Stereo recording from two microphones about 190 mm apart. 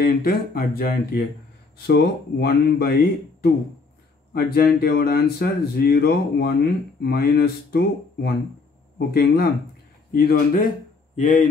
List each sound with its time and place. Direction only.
0.0 s speech: 50° left (ahead or behind)